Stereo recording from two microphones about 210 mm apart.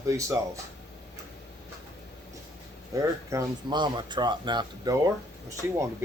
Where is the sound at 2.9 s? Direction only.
15° right (ahead or behind).